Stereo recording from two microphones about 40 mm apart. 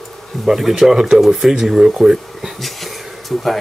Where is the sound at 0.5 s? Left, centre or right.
Centre.